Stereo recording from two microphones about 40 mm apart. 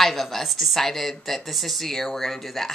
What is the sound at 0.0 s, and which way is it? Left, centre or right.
Speech, centre.